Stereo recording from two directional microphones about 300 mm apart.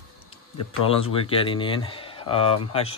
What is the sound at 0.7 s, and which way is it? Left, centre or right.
A man's voice, centre.